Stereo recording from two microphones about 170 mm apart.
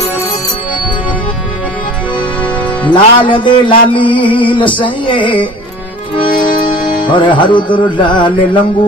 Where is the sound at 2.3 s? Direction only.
10° left (ahead or behind).